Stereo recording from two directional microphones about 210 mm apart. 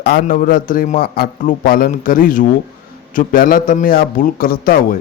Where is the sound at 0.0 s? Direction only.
45° left (ahead or behind).